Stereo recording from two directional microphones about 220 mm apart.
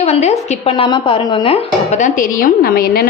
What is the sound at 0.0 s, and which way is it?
A woman's voice, 30° left (ahead or behind).